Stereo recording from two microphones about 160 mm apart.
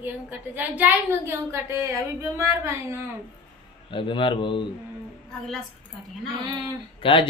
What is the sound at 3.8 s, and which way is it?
Speech, 30° left (ahead or behind).